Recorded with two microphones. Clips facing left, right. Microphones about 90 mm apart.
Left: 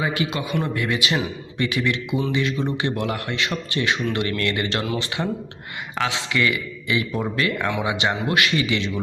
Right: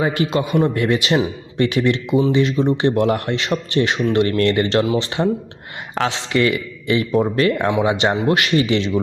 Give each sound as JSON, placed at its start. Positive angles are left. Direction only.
{"t": 0.0, "sound": "a man's voice", "side_deg": -40}
{"t": 5.9, "sound": "a man's voice", "side_deg": -40}